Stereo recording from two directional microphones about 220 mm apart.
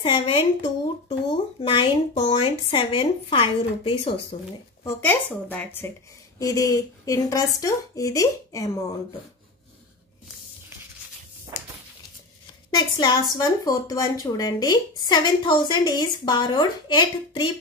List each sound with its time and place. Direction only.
0.0 s a woman's voice: 25° left (ahead or behind)
4.8 s a woman's voice: 10° left (ahead or behind)
12.7 s a woman's voice: 20° left (ahead or behind)